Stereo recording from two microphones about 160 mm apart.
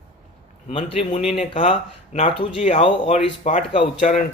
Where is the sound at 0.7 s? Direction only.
40° left (ahead or behind).